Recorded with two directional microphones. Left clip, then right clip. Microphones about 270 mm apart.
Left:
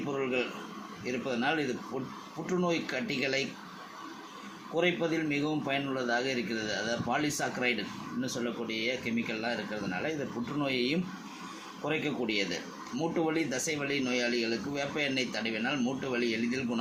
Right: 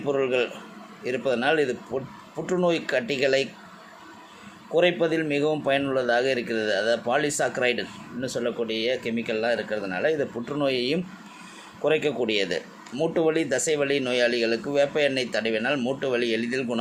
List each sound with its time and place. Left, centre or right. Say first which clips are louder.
0.2 s speech: right 8 dB; right
4.7 s speech: right 8 dB; right